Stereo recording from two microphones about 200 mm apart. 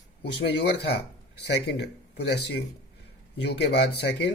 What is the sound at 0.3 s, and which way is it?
Speech, 55° left (ahead or behind).